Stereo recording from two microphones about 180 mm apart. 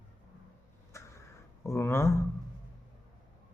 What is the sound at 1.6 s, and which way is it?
Speech, 15° left (ahead or behind).